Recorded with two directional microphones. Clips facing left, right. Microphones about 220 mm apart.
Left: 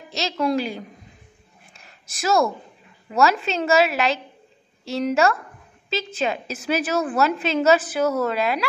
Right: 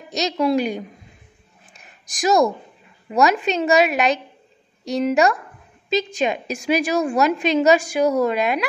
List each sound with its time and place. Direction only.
0.1 s a woman's voice: 15° right (ahead or behind)
2.0 s a woman's voice: 15° right (ahead or behind)